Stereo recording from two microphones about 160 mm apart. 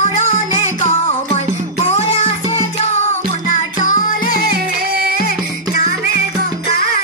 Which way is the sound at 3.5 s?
55° left (ahead or behind).